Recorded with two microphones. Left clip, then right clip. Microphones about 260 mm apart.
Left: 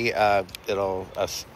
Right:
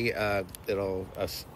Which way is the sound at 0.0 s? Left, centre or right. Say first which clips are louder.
Left 8 dB; centre.